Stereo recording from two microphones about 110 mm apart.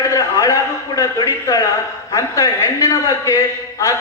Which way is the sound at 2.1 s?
30° left (ahead or behind).